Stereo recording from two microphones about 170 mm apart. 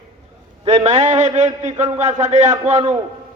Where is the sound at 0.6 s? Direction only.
40° right (ahead or behind).